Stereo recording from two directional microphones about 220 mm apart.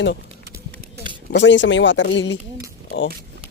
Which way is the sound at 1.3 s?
55° left (ahead or behind).